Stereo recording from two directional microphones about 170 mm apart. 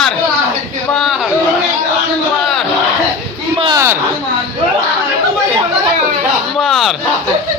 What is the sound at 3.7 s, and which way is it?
Speech, 15° right (ahead or behind).